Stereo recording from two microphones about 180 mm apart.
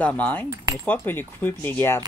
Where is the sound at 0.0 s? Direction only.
10° left (ahead or behind).